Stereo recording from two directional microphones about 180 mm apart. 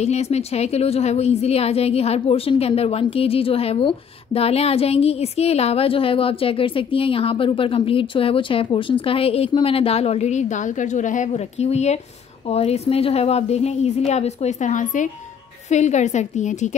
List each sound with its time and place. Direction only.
0.0 s a woman's voice: 35° left (ahead or behind)